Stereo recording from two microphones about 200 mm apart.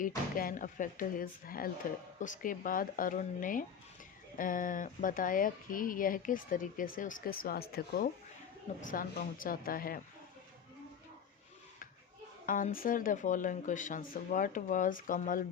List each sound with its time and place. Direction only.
0.3 s speech: 45° left (ahead or behind)
12.5 s speech: 45° left (ahead or behind)